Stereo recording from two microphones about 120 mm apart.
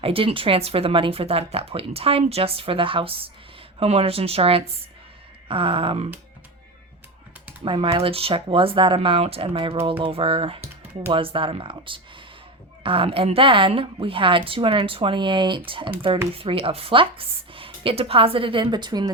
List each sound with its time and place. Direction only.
0.0 s speech: 50° right (ahead or behind)
7.6 s speech: 45° right (ahead or behind)